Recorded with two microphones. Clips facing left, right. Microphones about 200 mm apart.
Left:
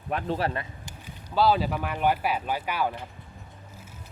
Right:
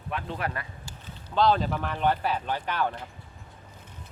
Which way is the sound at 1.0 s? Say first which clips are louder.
Even; 5° left (ahead or behind).